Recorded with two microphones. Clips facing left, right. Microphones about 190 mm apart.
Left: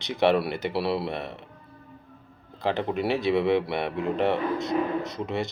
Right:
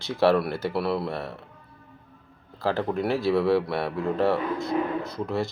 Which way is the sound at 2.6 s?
20° left (ahead or behind).